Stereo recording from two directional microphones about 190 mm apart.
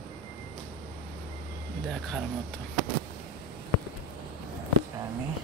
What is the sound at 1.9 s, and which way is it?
Speech, centre (ahead or behind).